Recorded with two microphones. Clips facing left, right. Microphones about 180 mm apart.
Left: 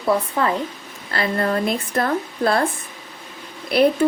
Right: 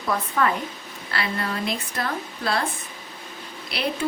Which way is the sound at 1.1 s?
45° left (ahead or behind).